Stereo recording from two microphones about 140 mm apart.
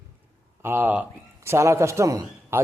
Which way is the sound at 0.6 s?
15° right (ahead or behind).